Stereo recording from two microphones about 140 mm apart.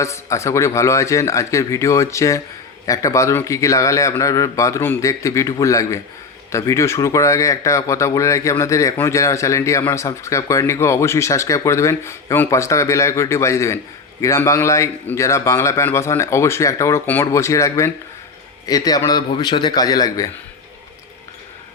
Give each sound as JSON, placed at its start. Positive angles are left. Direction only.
{"t": 0.0, "sound": "speech", "side_deg": 20}